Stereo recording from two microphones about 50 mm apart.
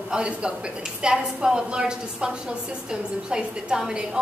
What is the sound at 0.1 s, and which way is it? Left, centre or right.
A man's voice, centre.